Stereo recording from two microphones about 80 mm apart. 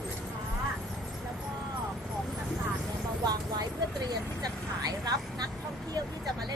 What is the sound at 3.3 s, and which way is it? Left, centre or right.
Vehicle, right.